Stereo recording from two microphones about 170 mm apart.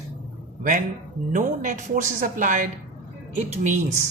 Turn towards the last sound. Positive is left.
turn(degrees=-45)  # may be behind; listen again after turning